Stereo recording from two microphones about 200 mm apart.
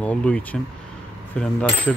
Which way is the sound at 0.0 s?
5° left (ahead or behind).